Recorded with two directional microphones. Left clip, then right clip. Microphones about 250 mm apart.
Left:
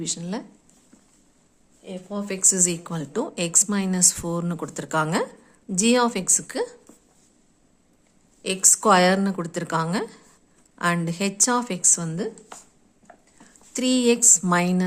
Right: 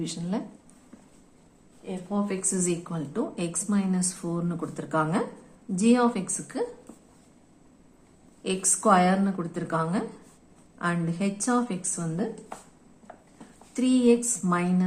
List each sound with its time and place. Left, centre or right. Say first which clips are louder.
0.0 s a woman's voice: left 2 dB; left
1.8 s a woman's voice: right 1 dB; left
8.4 s a woman's voice: left 6 dB; left
13.7 s a woman's voice: left 1 dB; left